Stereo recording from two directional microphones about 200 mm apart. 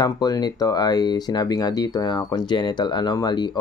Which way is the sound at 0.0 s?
20° left (ahead or behind).